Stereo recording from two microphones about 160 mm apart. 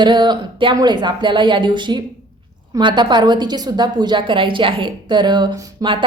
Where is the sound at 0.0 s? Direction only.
30° right (ahead or behind).